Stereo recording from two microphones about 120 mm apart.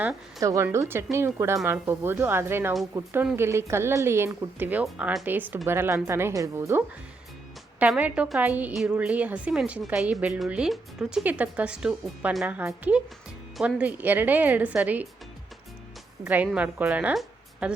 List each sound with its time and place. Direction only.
0.3 s a woman's voice: 25° right (ahead or behind)
7.9 s speech: 10° right (ahead or behind)
16.2 s speech: 10° right (ahead or behind)
17.2 s music: 5° right (ahead or behind)